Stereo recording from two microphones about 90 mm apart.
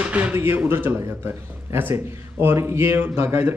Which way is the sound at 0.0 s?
15° right (ahead or behind).